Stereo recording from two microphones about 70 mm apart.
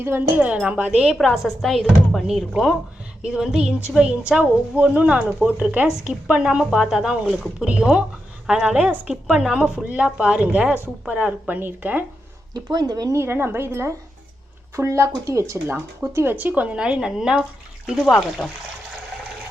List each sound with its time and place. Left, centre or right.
0.0 s speech: right
0.7 s a woman's voice: centre
1.1 s a woman's voice: centre; by 12.0 s right
12.7 s speech: right
13.1 s a woman's voice: right
16.1 s speech: right; by 18.5 s centre